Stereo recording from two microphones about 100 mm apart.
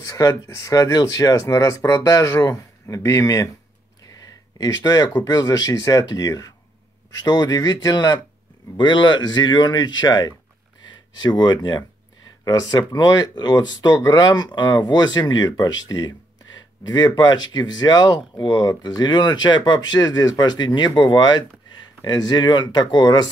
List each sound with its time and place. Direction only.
0.0 s speech: 35° left (ahead or behind)
4.2 s a sound: 35° left (ahead or behind)
5.2 s speech: 35° left (ahead or behind)